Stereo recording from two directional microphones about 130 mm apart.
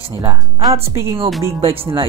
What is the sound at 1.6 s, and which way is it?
Speech, 45° right (ahead or behind).